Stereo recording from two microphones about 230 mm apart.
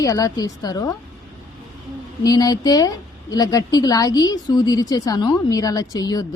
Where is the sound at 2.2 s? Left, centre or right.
Centre.